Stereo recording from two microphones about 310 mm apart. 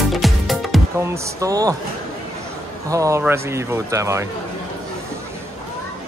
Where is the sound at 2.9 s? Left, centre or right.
Centre.